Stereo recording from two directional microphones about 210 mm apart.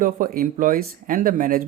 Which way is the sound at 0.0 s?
40° right (ahead or behind).